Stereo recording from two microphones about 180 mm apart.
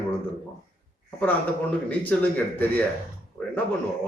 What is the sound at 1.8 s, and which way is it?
Speech, 10° left (ahead or behind).